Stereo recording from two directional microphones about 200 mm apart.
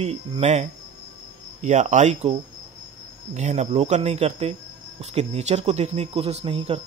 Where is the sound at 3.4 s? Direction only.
35° right (ahead or behind).